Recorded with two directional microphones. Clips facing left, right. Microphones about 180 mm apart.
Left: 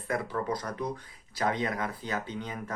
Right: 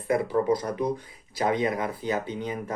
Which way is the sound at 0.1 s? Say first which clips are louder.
Right 8 dB; 15° right (ahead or behind).